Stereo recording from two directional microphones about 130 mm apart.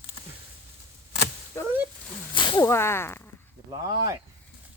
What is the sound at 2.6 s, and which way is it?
Whip, 20° left (ahead or behind).